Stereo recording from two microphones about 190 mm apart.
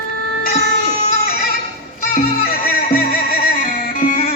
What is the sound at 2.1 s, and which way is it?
Music, 50° left (ahead or behind).